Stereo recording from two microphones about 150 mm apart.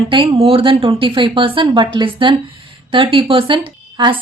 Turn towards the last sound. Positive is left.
turn(degrees=-35)  # may be behind; listen again after turning